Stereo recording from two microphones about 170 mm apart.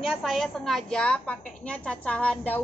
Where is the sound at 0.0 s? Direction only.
Centre (ahead or behind).